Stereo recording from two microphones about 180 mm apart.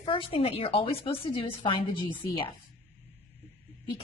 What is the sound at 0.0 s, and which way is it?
A woman's voice, 30° left (ahead or behind).